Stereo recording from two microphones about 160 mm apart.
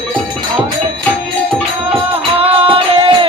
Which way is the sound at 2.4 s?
35° right (ahead or behind).